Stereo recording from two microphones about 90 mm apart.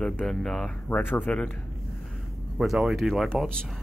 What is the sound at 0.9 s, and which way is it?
Speech, 20° left (ahead or behind).